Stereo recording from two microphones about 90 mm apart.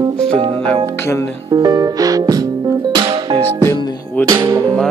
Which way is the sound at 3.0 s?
80° right.